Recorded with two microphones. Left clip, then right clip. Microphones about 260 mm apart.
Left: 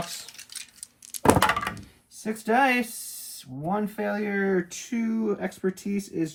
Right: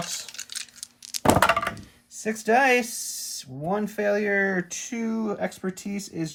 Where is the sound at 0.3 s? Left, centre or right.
Right.